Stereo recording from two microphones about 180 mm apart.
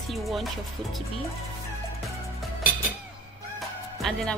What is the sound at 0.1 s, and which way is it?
Speech, centre (ahead or behind).